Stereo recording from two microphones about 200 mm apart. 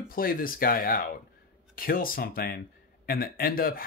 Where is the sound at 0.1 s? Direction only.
45° left (ahead or behind).